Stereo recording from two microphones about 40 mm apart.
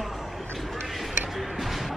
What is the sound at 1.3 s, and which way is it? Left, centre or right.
Music, centre.